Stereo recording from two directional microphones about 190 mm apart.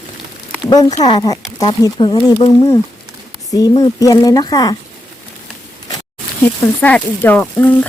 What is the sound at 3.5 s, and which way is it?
Speech, 20° left (ahead or behind).